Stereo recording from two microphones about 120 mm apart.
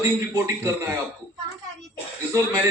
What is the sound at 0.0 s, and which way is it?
Speech, 20° right (ahead or behind).